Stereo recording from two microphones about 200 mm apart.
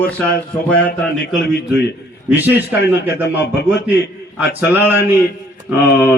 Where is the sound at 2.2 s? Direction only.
10° right (ahead or behind).